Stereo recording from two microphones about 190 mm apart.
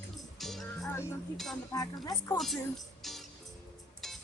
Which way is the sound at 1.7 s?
20° left (ahead or behind).